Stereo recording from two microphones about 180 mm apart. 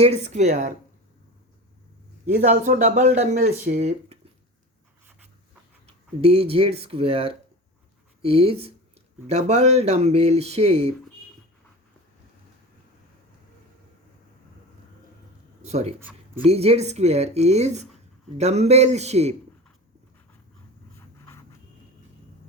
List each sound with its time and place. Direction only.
0.0 s speech: 35° right (ahead or behind)
2.2 s speech: 45° right (ahead or behind)
5.8 s speech: 35° right (ahead or behind)
15.6 s speech: 35° right (ahead or behind)
16.0 s a sound: 10° right (ahead or behind)
16.5 s speech: 35° right (ahead or behind)